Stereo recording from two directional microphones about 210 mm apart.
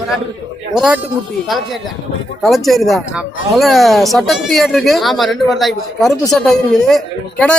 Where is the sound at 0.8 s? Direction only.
5° right (ahead or behind).